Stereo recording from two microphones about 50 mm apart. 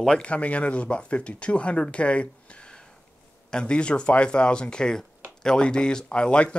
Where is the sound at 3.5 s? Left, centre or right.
Centre.